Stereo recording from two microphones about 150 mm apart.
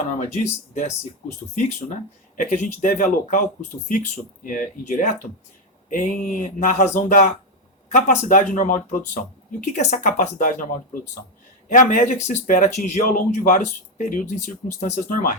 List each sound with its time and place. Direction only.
0.1 s speech: 50° left (ahead or behind)
2.4 s speech: 60° left (ahead or behind)
11.7 s speech: 60° left (ahead or behind)
13.0 s speech: 70° left (ahead or behind)